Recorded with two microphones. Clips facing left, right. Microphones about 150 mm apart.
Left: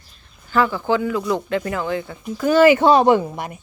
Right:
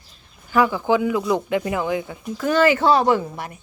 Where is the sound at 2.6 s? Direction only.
15° left (ahead or behind).